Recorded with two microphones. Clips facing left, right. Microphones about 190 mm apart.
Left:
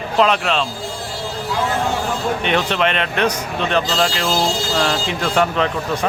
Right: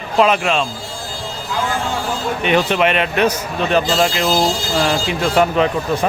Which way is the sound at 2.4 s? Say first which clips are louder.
Right 5 dB; 10° right (ahead or behind).